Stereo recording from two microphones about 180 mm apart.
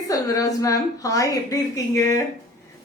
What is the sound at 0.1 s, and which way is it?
A woman's voice, 20° left (ahead or behind).